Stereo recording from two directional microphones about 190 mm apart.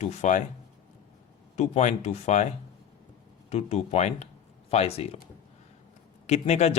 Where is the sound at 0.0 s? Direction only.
35° left (ahead or behind).